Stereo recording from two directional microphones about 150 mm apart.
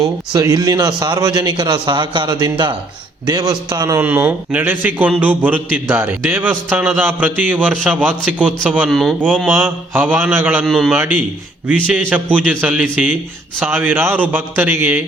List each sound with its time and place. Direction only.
0.0 s a man's voice: 25° right (ahead or behind)
4.0 s a man's voice: 10° right (ahead or behind)
9.5 s a man's voice: 15° right (ahead or behind)
10.7 s speech: centre (ahead or behind)
10.9 s a man's voice: 10° right (ahead or behind)